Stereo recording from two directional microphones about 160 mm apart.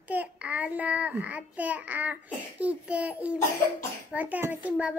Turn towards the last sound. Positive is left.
turn(degrees=-10)  # may be behind; listen again after turning